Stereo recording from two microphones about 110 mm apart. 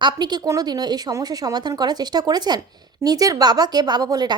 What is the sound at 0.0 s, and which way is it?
A woman's voice, 40° right (ahead or behind).